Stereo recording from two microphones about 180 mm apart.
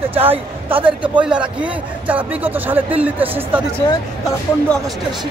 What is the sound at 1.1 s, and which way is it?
Speech, 5° right (ahead or behind).